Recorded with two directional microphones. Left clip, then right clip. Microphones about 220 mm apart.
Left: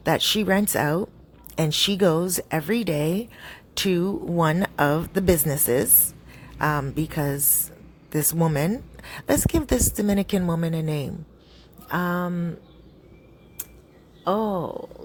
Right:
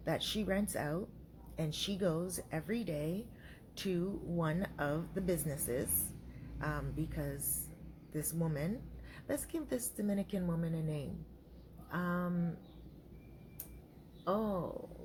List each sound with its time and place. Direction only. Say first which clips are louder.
0.0 s a woman's voice: left 16 dB; 45° left (ahead or behind)
14.3 s a woman's voice: left 12 dB; 45° left (ahead or behind)